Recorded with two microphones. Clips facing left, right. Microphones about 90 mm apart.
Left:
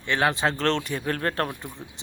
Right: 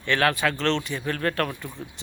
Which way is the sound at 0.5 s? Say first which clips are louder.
Even; 45° left (ahead or behind).